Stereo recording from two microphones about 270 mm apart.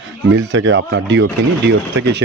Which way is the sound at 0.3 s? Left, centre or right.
Right.